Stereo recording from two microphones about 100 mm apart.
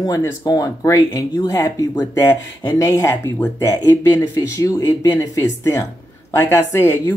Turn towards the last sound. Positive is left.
turn(degrees=30)  # may be behind; listen again after turning